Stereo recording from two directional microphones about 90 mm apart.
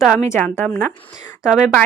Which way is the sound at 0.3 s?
15° left (ahead or behind).